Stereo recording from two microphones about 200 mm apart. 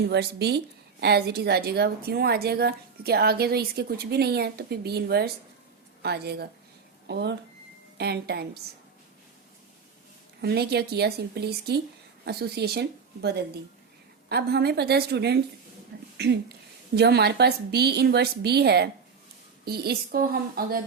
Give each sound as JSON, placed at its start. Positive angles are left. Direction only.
{"t": 0.0, "sound": "a woman's voice", "side_deg": -55}
{"t": 10.4, "sound": "a woman's voice", "side_deg": -55}
{"t": 14.3, "sound": "a woman's voice", "side_deg": -55}